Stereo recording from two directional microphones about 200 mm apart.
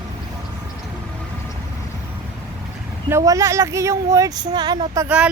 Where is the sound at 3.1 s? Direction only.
15° right (ahead or behind).